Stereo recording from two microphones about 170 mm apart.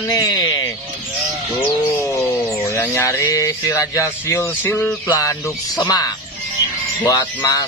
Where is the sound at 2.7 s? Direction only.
15° left (ahead or behind).